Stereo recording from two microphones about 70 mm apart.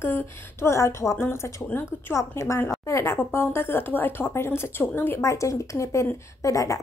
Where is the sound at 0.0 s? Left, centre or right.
Left.